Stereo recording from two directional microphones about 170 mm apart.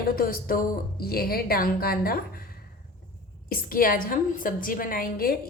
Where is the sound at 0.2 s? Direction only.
60° left (ahead or behind).